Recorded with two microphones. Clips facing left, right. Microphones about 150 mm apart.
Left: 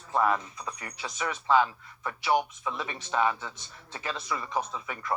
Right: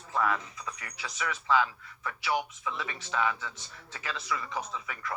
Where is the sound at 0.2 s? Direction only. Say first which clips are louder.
Left 3 dB; 35° left (ahead or behind).